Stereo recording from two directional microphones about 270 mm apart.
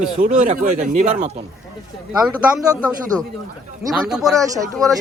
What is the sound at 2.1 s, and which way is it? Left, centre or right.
A man's voice, centre.